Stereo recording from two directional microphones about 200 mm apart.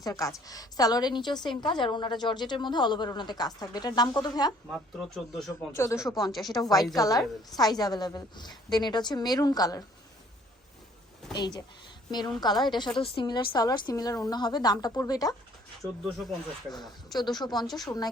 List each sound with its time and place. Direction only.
0.0 s a woman's voice: 15° left (ahead or behind)
4.9 s speech: centre (ahead or behind)
5.7 s a woman's voice: 15° left (ahead or behind)
11.3 s a woman's voice: 20° left (ahead or behind)
15.8 s speech: centre (ahead or behind)
17.2 s a woman's voice: 20° left (ahead or behind)